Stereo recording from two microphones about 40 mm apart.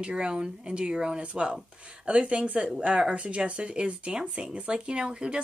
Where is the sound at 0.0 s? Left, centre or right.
Right.